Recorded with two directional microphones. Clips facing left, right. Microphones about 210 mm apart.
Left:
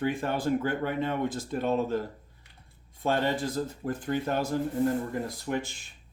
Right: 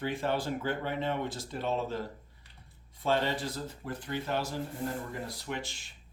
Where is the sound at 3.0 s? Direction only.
50° left (ahead or behind).